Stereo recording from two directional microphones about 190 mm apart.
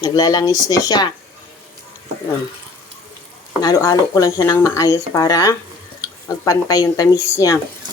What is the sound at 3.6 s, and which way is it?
Speech, 20° left (ahead or behind).